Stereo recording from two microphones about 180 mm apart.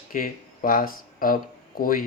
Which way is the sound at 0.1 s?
50° left (ahead or behind).